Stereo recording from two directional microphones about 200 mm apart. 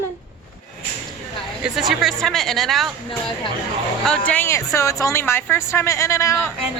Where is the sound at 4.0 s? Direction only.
5° left (ahead or behind).